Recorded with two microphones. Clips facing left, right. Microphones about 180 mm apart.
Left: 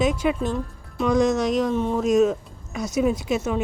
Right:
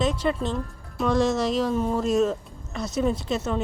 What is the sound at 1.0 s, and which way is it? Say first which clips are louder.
Speech: left 2 dB; centre (ahead or behind).